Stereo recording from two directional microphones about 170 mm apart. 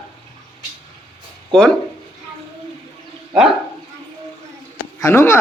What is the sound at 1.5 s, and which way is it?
Speech, 5° left (ahead or behind).